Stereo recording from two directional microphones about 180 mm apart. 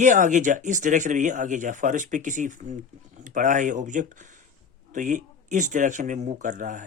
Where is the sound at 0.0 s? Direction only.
45° right (ahead or behind).